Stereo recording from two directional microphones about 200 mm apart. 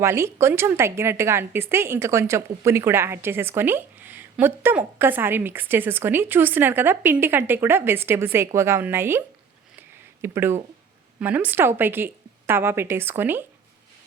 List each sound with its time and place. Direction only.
0.0 s a woman's voice: 15° right (ahead or behind)